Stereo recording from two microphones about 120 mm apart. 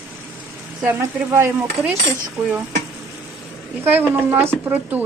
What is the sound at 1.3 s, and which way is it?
Stir, 20° right (ahead or behind).